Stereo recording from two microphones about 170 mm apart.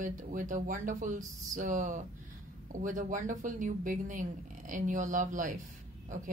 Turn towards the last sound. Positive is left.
turn(degrees=-50)  # may be behind; listen again after turning